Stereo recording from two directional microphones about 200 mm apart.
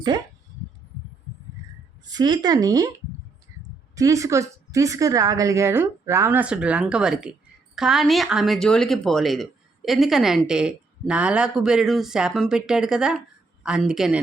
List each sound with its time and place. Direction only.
0.1 s speech: 20° right (ahead or behind)
2.0 s speech: 20° right (ahead or behind)
3.9 s a woman's voice: 15° right (ahead or behind)